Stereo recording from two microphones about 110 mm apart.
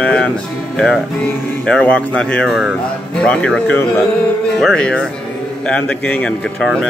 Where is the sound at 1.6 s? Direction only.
10° left (ahead or behind).